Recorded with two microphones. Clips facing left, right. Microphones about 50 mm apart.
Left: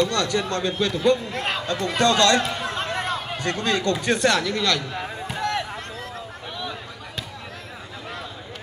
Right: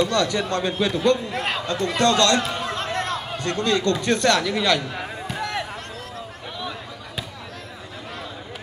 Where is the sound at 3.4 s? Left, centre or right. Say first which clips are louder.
Right 2 dB; left.